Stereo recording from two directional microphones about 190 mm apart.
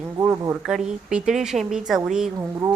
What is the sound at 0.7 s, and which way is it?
A woman's voice, centre (ahead or behind).